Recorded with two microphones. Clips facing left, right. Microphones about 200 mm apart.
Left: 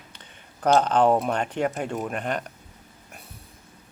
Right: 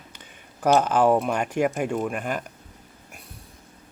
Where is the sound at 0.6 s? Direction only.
10° right (ahead or behind).